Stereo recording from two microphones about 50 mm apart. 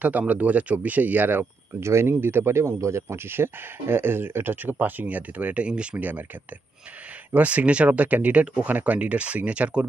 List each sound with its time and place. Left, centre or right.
0.0 s speech: right
1.7 s speech: right
2.1 s speech: right
5.9 s speech: right
7.3 s speech: right